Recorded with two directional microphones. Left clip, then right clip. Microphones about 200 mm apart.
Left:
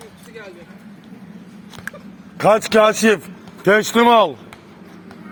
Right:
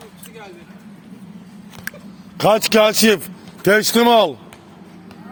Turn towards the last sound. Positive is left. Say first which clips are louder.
# left 1 dB
turn(degrees=-35)  # may be behind; listen again after turning